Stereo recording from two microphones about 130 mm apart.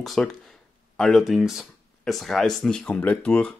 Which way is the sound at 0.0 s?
Centre (ahead or behind).